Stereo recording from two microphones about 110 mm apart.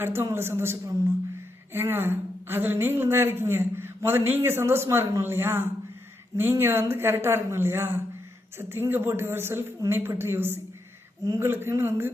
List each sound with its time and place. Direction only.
0.0 s a woman's voice: 25° right (ahead or behind)